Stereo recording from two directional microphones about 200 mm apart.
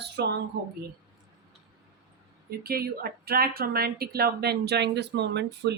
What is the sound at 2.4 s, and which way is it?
A woman's voice, 50° right (ahead or behind).